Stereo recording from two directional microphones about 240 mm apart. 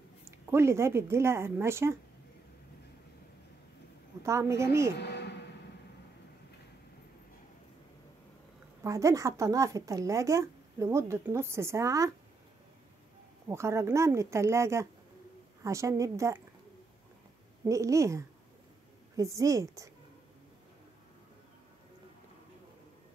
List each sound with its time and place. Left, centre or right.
0.5 s speech: centre
4.2 s speech: centre
5.0 s a sound: left
8.8 s speech: centre
13.5 s speech: centre
17.6 s speech: centre